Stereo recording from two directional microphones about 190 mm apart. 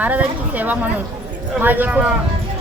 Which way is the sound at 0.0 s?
10° right (ahead or behind).